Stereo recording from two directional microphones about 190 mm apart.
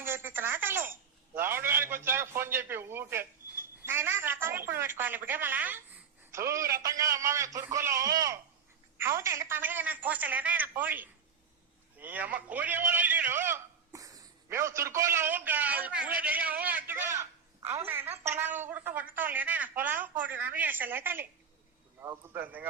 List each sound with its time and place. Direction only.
0.0 s telephone: 10° right (ahead or behind)
1.4 s a woman's voice: 10° right (ahead or behind)
11.9 s a sound: 10° right (ahead or behind)
17.8 s a woman's voice: 10° right (ahead or behind)